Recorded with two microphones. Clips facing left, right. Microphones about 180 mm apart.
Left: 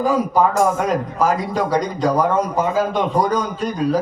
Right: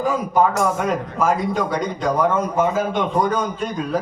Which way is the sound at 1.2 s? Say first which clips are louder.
Even; 35° left (ahead or behind).